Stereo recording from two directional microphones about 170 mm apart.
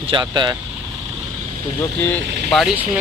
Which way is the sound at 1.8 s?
10° left (ahead or behind).